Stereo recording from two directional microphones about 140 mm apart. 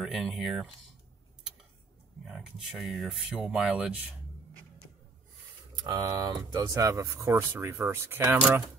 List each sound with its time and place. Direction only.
0.0 s speech: centre (ahead or behind)
2.2 s speech: 5° right (ahead or behind)
5.8 s speech: 30° right (ahead or behind); by 8.6 s 15° right (ahead or behind)